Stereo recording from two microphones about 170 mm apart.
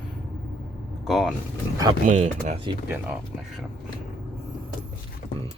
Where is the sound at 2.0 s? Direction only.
50° right (ahead or behind).